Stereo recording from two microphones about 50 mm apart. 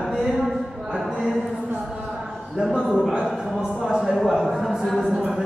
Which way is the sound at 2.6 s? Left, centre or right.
Centre.